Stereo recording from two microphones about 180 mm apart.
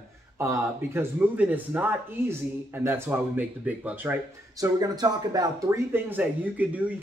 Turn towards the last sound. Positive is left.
turn(degrees=-10)  # may be behind; listen again after turning